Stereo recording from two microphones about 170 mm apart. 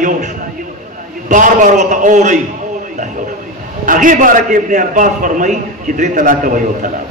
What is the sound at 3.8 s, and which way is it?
A man's voice, 50° right (ahead or behind).